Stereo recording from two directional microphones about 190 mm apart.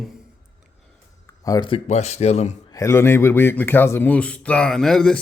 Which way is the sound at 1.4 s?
20° left (ahead or behind).